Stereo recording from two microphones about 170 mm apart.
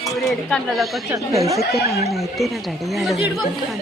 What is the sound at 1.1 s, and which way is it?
Speech, 20° right (ahead or behind).